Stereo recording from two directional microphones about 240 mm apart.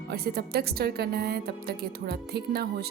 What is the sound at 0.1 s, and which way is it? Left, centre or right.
A woman's voice, right.